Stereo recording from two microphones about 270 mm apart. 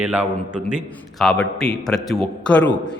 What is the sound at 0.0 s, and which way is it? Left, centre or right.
A man's voice, centre.